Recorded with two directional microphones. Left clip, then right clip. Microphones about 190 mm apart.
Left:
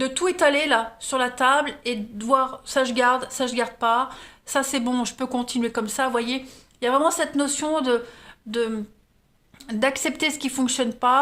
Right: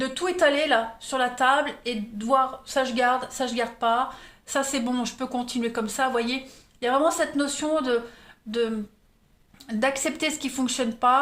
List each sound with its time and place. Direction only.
0.0 s speech: 50° left (ahead or behind); by 11.2 s 30° left (ahead or behind)